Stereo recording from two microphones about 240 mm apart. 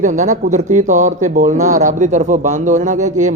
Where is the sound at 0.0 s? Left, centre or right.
Right.